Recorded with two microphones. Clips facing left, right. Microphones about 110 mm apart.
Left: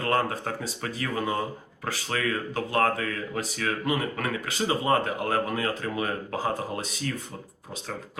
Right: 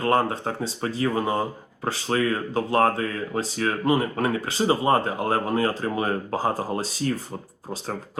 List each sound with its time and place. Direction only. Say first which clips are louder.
0.0 s speech: right 4 dB; 25° right (ahead or behind)